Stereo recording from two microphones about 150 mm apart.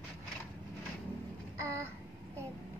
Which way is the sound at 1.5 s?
20° right (ahead or behind).